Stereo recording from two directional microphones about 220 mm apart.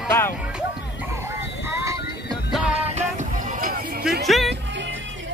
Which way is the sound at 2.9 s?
35° right (ahead or behind).